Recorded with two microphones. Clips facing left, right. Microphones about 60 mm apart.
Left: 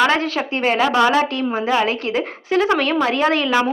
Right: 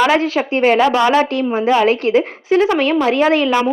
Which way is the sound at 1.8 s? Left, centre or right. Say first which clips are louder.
Right 6 dB; right.